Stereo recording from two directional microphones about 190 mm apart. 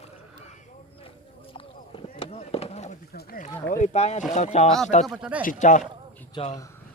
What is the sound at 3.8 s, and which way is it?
Speech, 35° left (ahead or behind).